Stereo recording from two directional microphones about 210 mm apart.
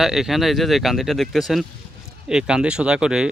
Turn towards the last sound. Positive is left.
turn(degrees=-5)  # may be behind; listen again after turning